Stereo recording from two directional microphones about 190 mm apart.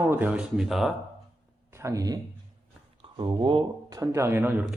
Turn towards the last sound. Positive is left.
turn(degrees=-10)  # may be behind; listen again after turning